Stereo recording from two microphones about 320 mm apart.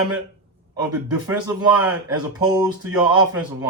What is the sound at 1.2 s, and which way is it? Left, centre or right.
Speech, centre.